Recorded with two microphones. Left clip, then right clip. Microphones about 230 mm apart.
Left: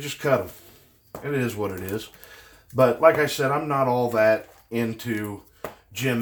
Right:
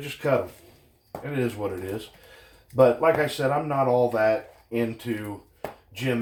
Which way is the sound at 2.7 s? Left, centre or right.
Left.